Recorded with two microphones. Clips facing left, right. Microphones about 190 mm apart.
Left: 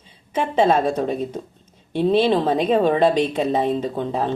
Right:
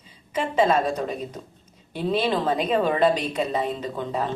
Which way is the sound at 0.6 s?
30° left (ahead or behind).